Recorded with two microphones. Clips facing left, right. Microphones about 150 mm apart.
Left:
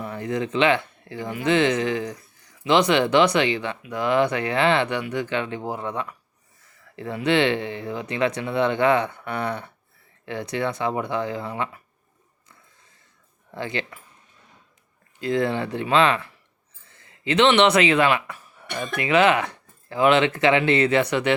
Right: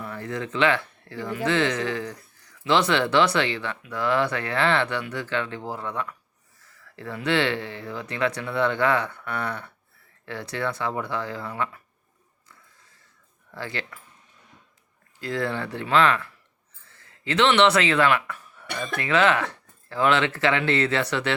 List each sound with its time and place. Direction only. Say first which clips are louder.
0.0 s speech: left 5 dB; 20° left (ahead or behind)
13.5 s speech: left 4 dB; 20° left (ahead or behind)
15.2 s speech: left 5 dB; 20° left (ahead or behind)